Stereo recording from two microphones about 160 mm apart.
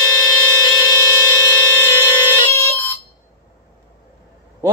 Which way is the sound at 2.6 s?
10° left (ahead or behind).